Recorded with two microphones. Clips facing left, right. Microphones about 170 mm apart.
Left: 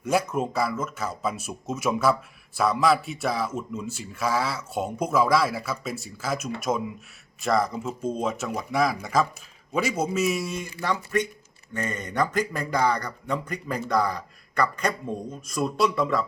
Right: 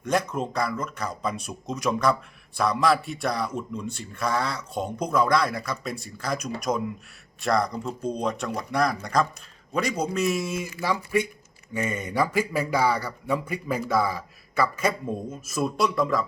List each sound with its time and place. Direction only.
0.0 s speech: 10° left (ahead or behind)